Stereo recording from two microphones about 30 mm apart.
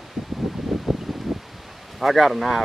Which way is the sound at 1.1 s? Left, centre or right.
Centre.